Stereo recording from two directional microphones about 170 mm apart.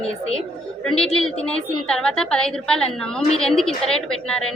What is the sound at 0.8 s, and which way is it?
A woman's voice, centre (ahead or behind).